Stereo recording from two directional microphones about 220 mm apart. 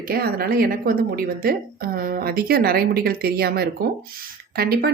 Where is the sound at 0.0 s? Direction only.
45° right (ahead or behind).